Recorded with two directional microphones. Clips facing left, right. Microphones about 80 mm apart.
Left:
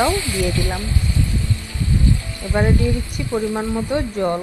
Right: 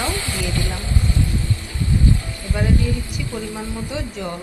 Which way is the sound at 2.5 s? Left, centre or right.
Left.